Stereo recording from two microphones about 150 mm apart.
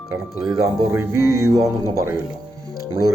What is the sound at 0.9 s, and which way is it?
Music, 20° right (ahead or behind).